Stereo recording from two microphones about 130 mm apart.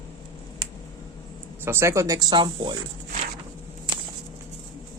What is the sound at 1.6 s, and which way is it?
A man's voice, 20° right (ahead or behind).